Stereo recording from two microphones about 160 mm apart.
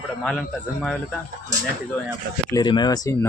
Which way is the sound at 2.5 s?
25° left (ahead or behind).